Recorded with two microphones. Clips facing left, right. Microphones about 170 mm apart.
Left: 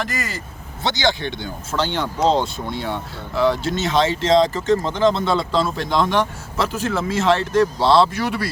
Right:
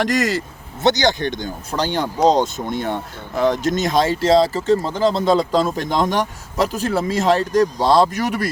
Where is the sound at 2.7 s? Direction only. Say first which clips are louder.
Right 3 dB; 45° right (ahead or behind).